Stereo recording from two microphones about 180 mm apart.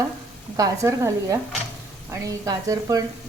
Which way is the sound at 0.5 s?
20° right (ahead or behind).